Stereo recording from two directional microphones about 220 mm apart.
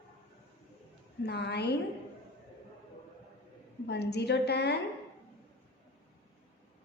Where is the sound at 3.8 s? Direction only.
50° left (ahead or behind).